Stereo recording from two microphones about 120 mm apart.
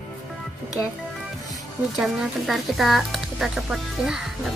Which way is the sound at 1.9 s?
Centre (ahead or behind).